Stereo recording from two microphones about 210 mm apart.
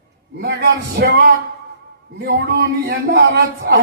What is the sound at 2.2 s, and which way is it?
A man's voice, 50° right (ahead or behind).